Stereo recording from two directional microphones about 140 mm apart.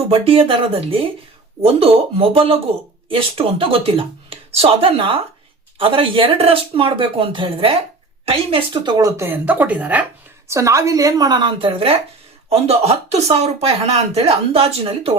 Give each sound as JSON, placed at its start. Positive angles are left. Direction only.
{"t": 0.1, "sound": "a woman's voice", "side_deg": -40}
{"t": 10.5, "sound": "a woman's voice", "side_deg": -20}